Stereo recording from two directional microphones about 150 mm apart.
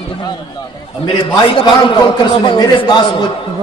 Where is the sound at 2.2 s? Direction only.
30° left (ahead or behind).